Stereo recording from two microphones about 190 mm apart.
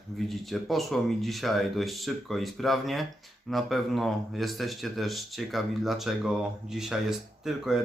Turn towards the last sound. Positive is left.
turn(degrees=0)  # may be behind; listen again after turning